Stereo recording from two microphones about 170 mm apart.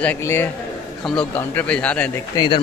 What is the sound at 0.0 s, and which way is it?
Speech, 10° left (ahead or behind).